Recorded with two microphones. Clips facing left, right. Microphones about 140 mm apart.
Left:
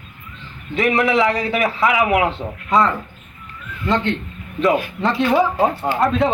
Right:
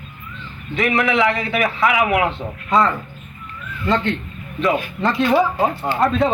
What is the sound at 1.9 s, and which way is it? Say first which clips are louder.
Speech: left 2 dB; 25° left (ahead or behind).